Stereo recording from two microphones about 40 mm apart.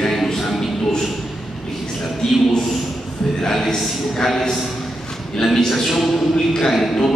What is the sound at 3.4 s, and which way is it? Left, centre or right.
A man's voice, centre.